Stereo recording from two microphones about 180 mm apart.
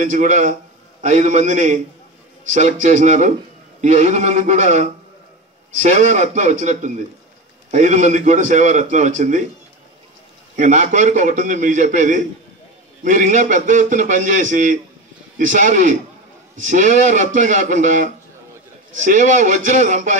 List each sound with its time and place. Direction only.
0.0 s a man's voice: 45° right (ahead or behind)
10.5 s a man's voice: 45° right (ahead or behind)